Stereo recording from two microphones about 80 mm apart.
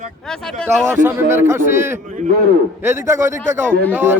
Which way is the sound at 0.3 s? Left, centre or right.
Centre.